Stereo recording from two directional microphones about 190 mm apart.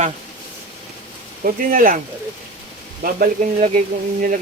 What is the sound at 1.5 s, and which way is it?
Speech, 45° right (ahead or behind).